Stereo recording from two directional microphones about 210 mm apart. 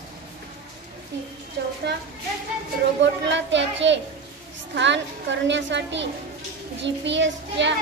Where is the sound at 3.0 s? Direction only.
60° right (ahead or behind).